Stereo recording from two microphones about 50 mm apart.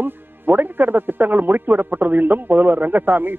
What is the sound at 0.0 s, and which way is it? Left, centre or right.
Speech, right.